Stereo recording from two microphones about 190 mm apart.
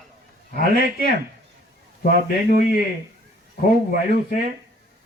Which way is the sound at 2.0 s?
50° left (ahead or behind).